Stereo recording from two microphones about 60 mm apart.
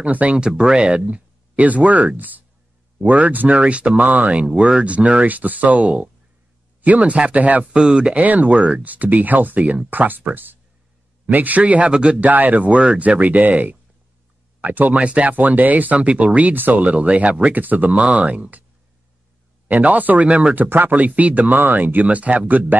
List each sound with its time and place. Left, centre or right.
0.0 s speech: right
7.6 s speech: centre
19.7 s speech: right